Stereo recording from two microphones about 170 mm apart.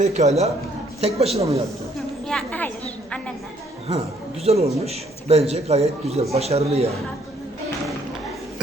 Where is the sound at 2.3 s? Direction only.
5° left (ahead or behind).